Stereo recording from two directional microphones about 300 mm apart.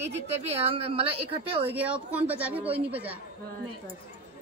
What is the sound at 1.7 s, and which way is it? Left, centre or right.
Speech, centre.